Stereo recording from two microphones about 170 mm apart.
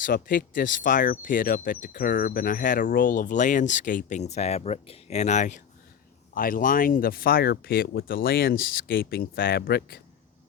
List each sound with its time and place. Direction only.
0.0 s speech: 55° left (ahead or behind)